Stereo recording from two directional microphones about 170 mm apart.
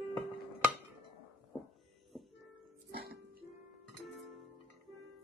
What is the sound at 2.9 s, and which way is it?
Music, 70° right (ahead or behind).